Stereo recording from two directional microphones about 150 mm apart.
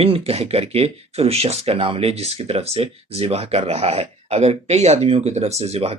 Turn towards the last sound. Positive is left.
turn(degrees=-45)  # may be behind; listen again after turning